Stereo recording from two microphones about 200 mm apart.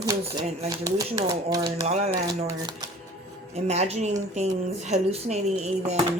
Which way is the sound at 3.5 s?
35° right (ahead or behind).